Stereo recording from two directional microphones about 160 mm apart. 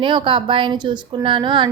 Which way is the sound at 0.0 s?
30° right (ahead or behind).